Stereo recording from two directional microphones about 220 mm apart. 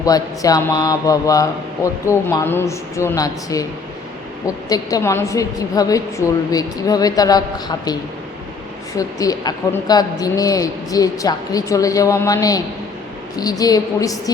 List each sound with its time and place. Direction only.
0.0 s a man's voice: 15° left (ahead or behind)
9.0 s a man's voice: 15° left (ahead or behind)